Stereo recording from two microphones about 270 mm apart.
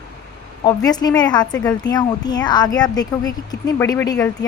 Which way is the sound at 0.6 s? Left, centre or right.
Centre.